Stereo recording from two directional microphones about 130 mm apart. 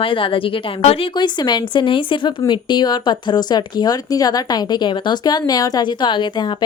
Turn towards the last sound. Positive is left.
turn(degrees=35)  # may be behind; listen again after turning